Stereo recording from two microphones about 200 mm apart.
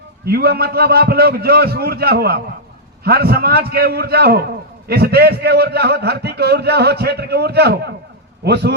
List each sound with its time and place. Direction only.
0.3 s a man's voice: 50° right (ahead or behind)